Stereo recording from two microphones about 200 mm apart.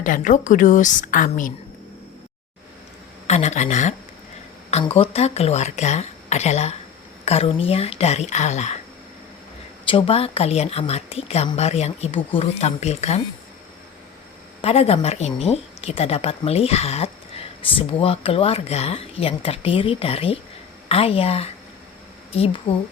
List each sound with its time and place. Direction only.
0.0 s a woman's voice: 40° left (ahead or behind)
3.2 s a woman's voice: 35° left (ahead or behind)
9.9 s a woman's voice: 30° left (ahead or behind)
14.6 s a woman's voice: 30° left (ahead or behind)
22.7 s a woman's voice: 25° left (ahead or behind)